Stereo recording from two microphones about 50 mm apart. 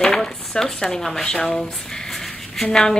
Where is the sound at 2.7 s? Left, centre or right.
Centre.